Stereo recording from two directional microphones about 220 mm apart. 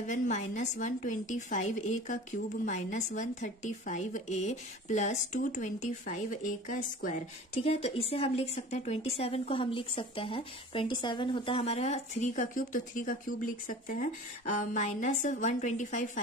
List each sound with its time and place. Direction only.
0.0 s speech: 35° left (ahead or behind)